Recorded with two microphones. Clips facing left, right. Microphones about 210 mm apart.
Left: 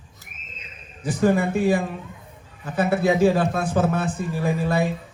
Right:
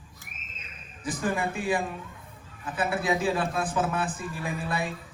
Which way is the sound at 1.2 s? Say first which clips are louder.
Left 10 dB; 40° left (ahead or behind).